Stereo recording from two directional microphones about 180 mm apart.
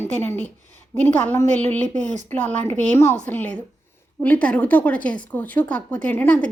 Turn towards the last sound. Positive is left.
turn(degrees=10)  # may be behind; listen again after turning